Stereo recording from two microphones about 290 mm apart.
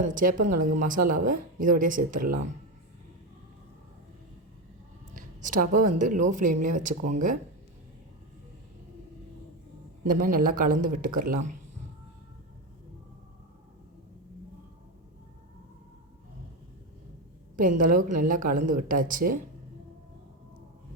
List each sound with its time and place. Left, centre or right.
0.0 s speech: right
5.1 s a sound: right
6.0 s speech: right
10.1 s speech: right
10.8 s speech: right
11.3 s speech: right
17.6 s speech: right